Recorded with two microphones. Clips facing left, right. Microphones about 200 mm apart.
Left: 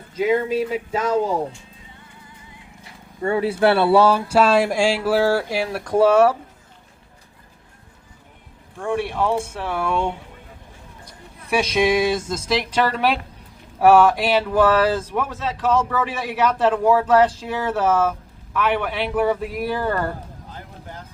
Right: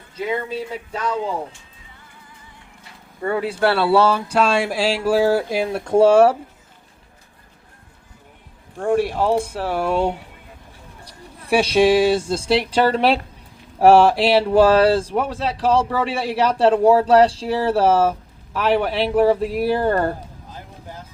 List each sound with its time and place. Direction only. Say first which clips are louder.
0.4 s speech: left 6 dB; 10° left (ahead or behind)
0.9 s speech: left 4 dB; 45° left (ahead or behind)
3.2 s speech: left 2 dB; 25° left (ahead or behind); by 4.9 s centre (ahead or behind)
4.9 s speech: right 2 dB; 15° right (ahead or behind); by 6.3 s 30° right (ahead or behind)
8.8 s speech: right 4 dB; 40° right (ahead or behind)
11.4 s speech: right 4 dB; 30° right (ahead or behind)